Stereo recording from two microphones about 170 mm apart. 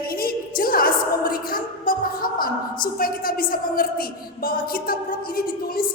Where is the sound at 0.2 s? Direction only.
60° left (ahead or behind).